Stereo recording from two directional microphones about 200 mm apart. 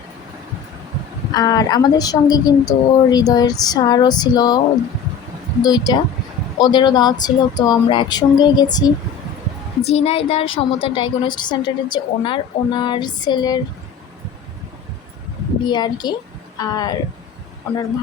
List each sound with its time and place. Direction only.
1.3 s a woman's voice: 20° left (ahead or behind)
5.6 s a woman's voice: 20° left (ahead or behind)
9.8 s a woman's voice: 30° left (ahead or behind)
15.6 s a woman's voice: 20° left (ahead or behind)